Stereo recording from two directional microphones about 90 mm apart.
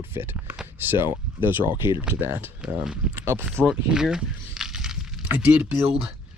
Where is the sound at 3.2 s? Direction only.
25° right (ahead or behind).